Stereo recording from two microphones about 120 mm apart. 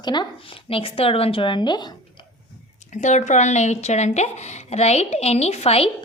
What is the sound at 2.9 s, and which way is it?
Speech, 80° left.